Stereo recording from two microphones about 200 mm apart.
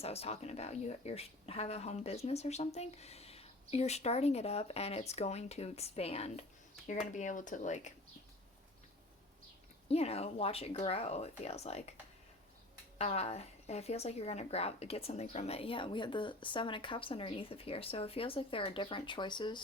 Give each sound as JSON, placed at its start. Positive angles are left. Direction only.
{"t": 0.0, "sound": "speech", "side_deg": 30}
{"t": 9.9, "sound": "speech", "side_deg": 30}
{"t": 13.0, "sound": "a woman's voice", "side_deg": 30}